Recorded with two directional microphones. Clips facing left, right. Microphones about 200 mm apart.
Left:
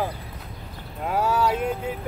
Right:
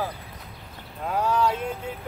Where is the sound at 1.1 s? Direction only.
10° left (ahead or behind).